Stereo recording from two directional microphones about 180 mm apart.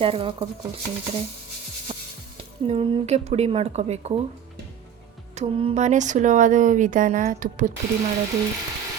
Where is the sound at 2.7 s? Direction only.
35° right (ahead or behind).